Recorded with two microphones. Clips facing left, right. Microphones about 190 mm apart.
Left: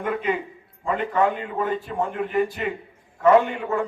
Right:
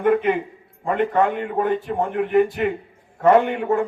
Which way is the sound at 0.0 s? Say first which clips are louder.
Right 7 dB; 55° right (ahead or behind).